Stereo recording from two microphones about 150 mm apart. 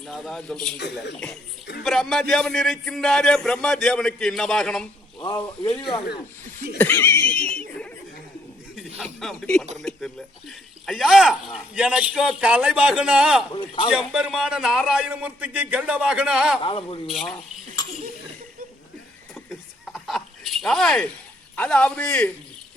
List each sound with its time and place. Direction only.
0.0 s speech: centre (ahead or behind)
1.8 s speech: centre (ahead or behind)
5.2 s speech: 30° left (ahead or behind)
6.7 s a man's voice: 15° left (ahead or behind)
8.7 s speech: 5° left (ahead or behind)
13.5 s speech: 30° left (ahead or behind)
14.1 s speech: 5° right (ahead or behind)
16.6 s speech: 35° left (ahead or behind)
19.5 s a sound: centre (ahead or behind)
21.5 s a man's voice: 10° left (ahead or behind)